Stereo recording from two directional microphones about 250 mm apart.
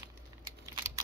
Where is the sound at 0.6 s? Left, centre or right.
Centre.